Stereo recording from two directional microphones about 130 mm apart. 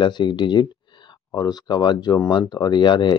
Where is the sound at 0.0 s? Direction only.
35° left (ahead or behind).